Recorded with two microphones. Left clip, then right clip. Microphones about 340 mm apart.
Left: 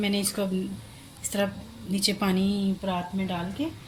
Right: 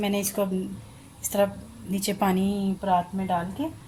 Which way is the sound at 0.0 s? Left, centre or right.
Right.